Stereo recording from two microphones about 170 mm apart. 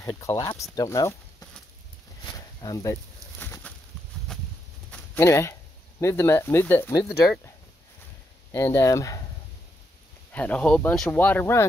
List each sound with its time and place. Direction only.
0.0 s speech: 20° left (ahead or behind)
2.2 s a sound: 20° left (ahead or behind)
4.9 s speech: 15° left (ahead or behind)
8.5 s speech: 15° left (ahead or behind)
10.3 s speech: 10° left (ahead or behind)